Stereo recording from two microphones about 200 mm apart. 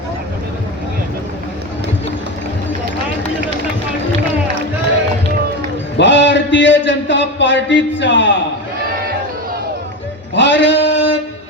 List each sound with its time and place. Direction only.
6.0 s a man's voice: 65° left (ahead or behind)
10.3 s male singing: 65° left (ahead or behind)